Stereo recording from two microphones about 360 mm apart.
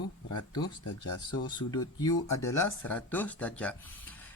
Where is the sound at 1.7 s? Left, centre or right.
Centre.